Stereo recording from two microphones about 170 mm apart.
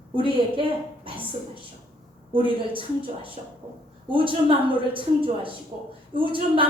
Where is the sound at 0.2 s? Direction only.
30° right (ahead or behind).